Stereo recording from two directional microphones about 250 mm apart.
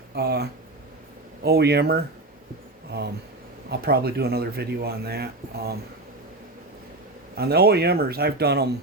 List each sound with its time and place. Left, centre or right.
0.2 s speech: right
3.7 s speech: right
7.3 s speech: right